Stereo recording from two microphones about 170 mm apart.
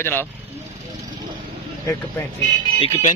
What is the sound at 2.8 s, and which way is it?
Speech, 35° left (ahead or behind).